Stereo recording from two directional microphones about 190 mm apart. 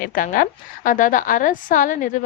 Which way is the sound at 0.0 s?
45° left (ahead or behind).